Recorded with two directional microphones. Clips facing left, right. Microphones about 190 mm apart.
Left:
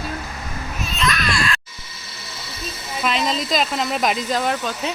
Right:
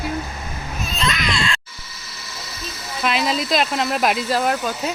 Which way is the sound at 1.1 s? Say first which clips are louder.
Even; 20° right (ahead or behind).